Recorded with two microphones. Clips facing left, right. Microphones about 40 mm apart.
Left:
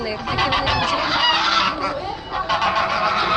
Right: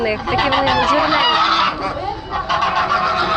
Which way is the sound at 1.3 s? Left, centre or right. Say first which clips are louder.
Right 3 dB; centre.